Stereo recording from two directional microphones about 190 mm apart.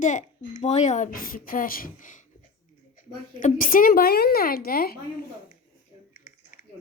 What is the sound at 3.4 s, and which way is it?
A woman's voice, 45° left (ahead or behind).